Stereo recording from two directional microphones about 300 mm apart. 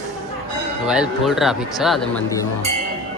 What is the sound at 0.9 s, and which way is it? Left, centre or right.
Speech, centre.